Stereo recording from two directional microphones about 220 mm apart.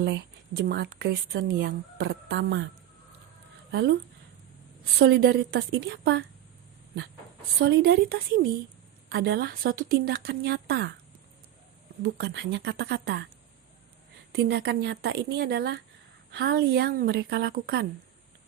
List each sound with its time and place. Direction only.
0.0 s speech: 50° right (ahead or behind)
3.7 s speech: 50° right (ahead or behind)
4.9 s speech: 50° right (ahead or behind)
7.6 s speech: 50° right (ahead or behind)
12.0 s speech: 50° right (ahead or behind)
14.3 s speech: 45° right (ahead or behind)